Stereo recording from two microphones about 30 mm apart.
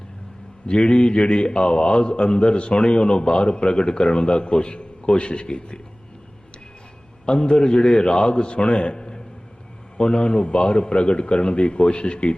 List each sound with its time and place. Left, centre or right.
0.7 s a man's voice: left
7.3 s a man's voice: left